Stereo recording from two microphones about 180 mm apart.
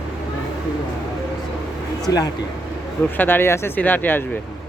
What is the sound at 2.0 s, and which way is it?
Speech, 20° left (ahead or behind).